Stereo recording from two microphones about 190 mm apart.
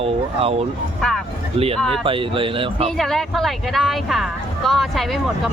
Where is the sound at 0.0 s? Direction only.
30° right (ahead or behind).